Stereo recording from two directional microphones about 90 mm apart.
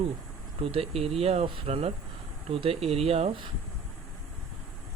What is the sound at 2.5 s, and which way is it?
Speech, 90° right.